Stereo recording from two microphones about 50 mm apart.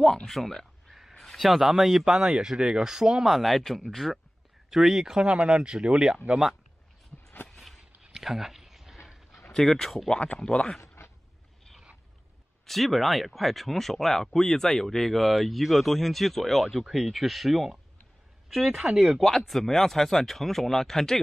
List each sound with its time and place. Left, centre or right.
0.0 s a man's voice: centre
7.4 s a sound: centre
8.0 s a sound: centre
9.5 s speech: centre
10.0 s speech: centre
12.6 s speech: centre